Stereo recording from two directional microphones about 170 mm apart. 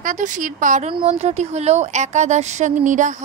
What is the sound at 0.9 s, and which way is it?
Speech, 35° right (ahead or behind).